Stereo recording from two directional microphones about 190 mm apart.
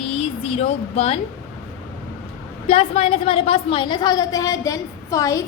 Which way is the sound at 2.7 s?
30° left (ahead or behind).